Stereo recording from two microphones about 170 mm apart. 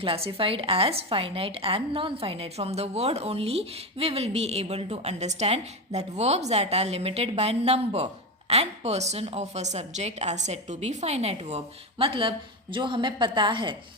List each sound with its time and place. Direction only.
0.0 s a woman's voice: 30° right (ahead or behind)